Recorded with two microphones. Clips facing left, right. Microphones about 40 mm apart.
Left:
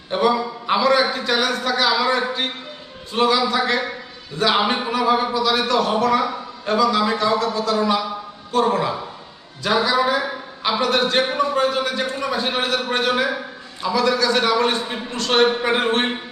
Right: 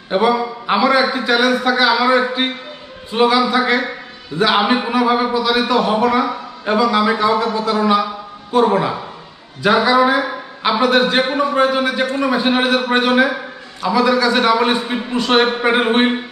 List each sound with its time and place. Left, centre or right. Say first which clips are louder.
0.1 s a man's voice: right 3 dB; centre